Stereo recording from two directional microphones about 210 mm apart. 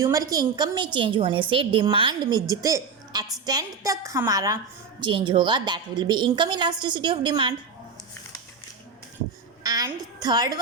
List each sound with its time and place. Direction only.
0.0 s a woman's voice: 15° right (ahead or behind)
9.6 s a woman's voice: 20° right (ahead or behind)